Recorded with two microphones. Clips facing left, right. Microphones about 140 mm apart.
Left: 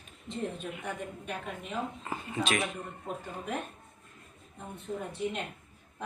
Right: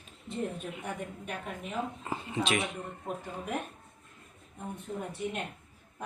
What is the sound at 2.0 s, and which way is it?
Speech, 25° right (ahead or behind).